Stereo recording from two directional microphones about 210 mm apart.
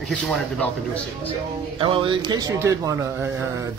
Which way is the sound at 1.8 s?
25° right (ahead or behind).